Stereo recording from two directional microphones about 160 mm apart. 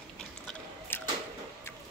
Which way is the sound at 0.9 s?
15° left (ahead or behind).